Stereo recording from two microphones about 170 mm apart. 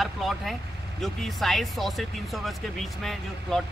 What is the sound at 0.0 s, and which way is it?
Speech, centre (ahead or behind).